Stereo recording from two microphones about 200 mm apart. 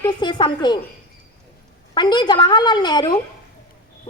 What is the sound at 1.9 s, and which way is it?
A woman's voice, 20° left (ahead or behind).